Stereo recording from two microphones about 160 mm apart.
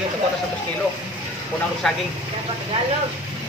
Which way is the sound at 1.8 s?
5° left (ahead or behind).